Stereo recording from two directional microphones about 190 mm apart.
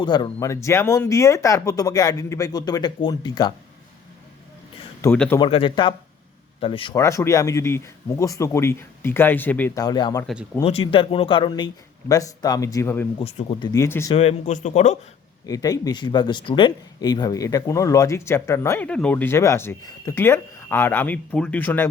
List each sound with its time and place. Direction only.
0.0 s speech: 25° left (ahead or behind)
5.0 s speech: 10° left (ahead or behind)
5.4 s speech: 25° left (ahead or behind)
10.6 s speech: 30° left (ahead or behind); by 13.1 s 15° left (ahead or behind)
13.1 s speech: 30° left (ahead or behind)
13.7 s speech: 15° left (ahead or behind)
14.2 s a man's voice: 35° left (ahead or behind)
15.4 s speech: 20° left (ahead or behind)